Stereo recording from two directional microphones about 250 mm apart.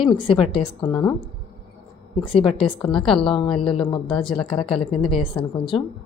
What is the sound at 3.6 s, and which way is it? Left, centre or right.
Speech, centre.